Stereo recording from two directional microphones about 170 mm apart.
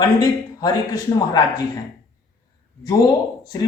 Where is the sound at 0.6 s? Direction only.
20° left (ahead or behind).